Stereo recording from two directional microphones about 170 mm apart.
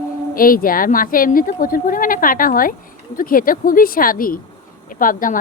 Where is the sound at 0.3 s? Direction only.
55° left (ahead or behind).